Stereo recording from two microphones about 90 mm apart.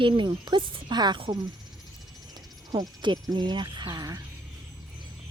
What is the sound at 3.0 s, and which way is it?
Speech, 60° right (ahead or behind).